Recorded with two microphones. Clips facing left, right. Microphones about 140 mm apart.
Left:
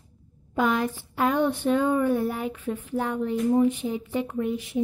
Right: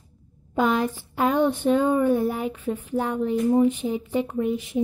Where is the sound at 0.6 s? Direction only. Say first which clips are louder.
Right 2 dB; 25° right (ahead or behind).